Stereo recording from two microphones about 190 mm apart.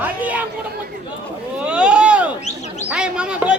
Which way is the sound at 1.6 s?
5° right (ahead or behind).